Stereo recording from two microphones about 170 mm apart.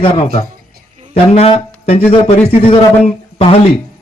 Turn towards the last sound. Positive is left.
turn(degrees=35)  # may be behind; listen again after turning